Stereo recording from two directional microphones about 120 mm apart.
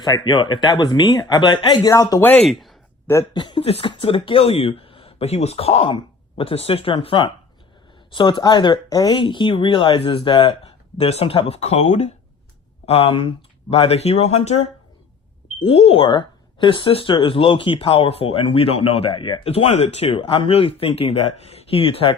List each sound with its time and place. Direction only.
0.0 s speech: 35° left (ahead or behind)
2.5 s speech: centre (ahead or behind)
3.3 s speech: 40° left (ahead or behind)
3.6 s speech: 55° left (ahead or behind)
12.8 s speech: 55° left (ahead or behind)